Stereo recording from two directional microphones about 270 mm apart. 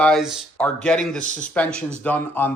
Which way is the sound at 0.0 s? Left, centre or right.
Centre.